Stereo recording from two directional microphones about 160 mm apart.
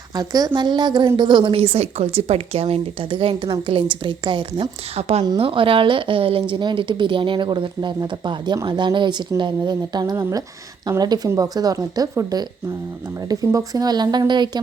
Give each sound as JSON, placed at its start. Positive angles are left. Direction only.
{"t": 0.1, "sound": "a woman's voice", "side_deg": -25}